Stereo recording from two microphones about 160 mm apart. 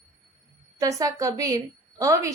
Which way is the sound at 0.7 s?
20° right (ahead or behind).